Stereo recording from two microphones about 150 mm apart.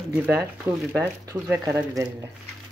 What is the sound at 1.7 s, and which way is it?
Speech, 20° right (ahead or behind).